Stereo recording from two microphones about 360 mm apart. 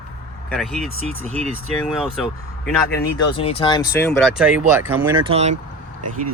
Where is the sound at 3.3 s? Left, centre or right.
Centre.